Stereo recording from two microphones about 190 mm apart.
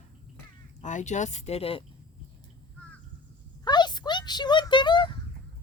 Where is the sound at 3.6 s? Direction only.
20° left (ahead or behind).